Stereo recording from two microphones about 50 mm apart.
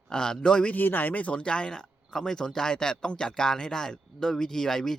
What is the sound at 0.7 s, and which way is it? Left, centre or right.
Speech, left.